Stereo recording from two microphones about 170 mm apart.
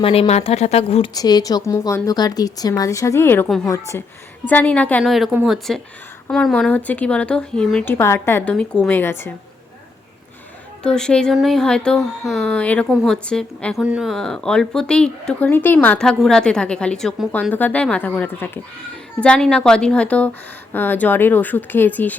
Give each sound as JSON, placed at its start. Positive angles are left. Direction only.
{"t": 0.0, "sound": "speech", "side_deg": 35}
{"t": 1.1, "sound": "a woman's voice", "side_deg": 20}
{"t": 10.8, "sound": "a woman's voice", "side_deg": 5}